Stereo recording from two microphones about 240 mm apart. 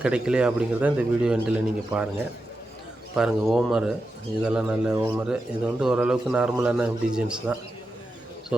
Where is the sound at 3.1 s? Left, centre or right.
Centre.